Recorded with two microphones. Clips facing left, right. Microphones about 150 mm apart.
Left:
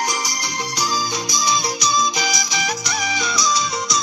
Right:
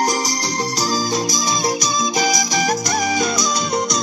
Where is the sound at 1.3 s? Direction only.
45° right (ahead or behind).